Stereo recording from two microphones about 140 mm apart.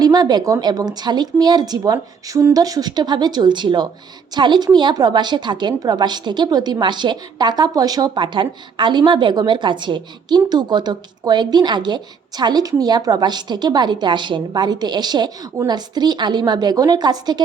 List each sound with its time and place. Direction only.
0.0 s a woman's voice: 25° right (ahead or behind)